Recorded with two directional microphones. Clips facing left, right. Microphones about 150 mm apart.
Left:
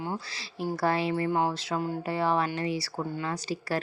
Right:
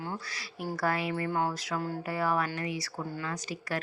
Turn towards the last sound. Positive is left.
turn(degrees=30)  # may be behind; listen again after turning